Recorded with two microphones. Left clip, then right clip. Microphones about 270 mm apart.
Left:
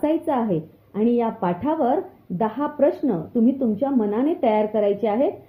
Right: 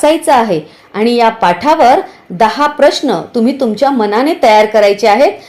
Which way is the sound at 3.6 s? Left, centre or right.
Right.